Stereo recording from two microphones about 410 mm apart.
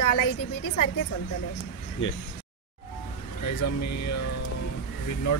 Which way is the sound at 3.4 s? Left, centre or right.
Left.